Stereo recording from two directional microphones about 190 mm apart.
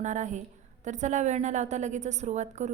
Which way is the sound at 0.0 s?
40° right (ahead or behind).